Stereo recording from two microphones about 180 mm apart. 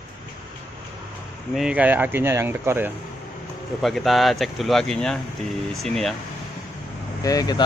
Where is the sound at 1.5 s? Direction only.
5° right (ahead or behind).